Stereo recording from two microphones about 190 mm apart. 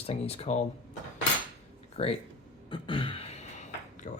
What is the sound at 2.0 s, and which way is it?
Speech, 30° left (ahead or behind).